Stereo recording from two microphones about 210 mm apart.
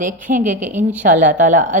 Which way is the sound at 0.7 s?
10° right (ahead or behind).